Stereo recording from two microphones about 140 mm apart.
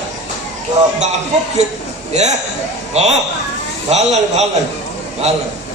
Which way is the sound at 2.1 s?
55° right (ahead or behind).